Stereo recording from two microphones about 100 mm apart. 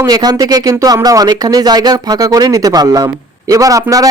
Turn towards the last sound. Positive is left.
turn(degrees=-35)  # may be behind; listen again after turning